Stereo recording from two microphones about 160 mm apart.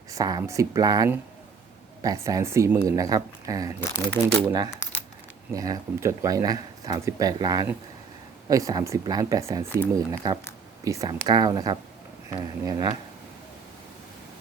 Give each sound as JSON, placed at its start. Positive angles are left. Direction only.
{"t": 0.1, "sound": "speech", "side_deg": -25}
{"t": 3.8, "sound": "speech", "side_deg": 10}
{"t": 5.5, "sound": "speech", "side_deg": -20}